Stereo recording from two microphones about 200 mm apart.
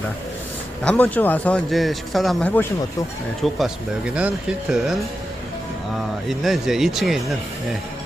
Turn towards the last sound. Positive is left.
turn(degrees=0)  # may be behind; listen again after turning